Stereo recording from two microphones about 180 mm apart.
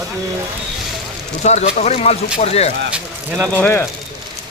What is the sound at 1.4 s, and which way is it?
Speech, 40° left (ahead or behind).